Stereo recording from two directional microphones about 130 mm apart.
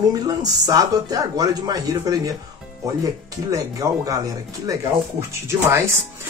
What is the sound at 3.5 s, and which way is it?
Speech, 25° right (ahead or behind).